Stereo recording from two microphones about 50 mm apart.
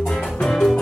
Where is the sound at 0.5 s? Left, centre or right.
Centre.